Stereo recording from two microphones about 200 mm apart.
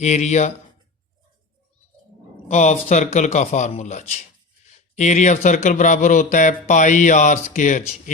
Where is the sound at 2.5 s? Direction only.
35° left (ahead or behind).